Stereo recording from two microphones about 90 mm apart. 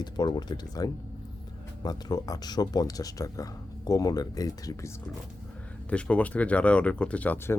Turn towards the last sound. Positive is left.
turn(degrees=25)  # may be behind; listen again after turning